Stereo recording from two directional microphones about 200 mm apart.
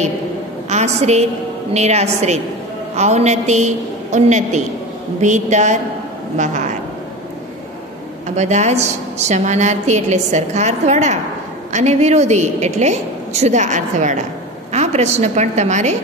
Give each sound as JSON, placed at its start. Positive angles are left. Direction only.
{"t": 0.7, "sound": "a woman's voice", "side_deg": -35}
{"t": 8.4, "sound": "a woman's voice", "side_deg": -35}